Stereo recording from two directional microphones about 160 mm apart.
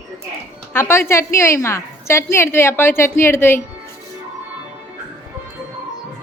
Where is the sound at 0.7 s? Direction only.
15° left (ahead or behind).